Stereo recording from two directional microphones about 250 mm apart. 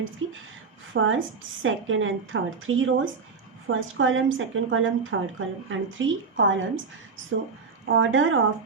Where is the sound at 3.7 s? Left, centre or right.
Right.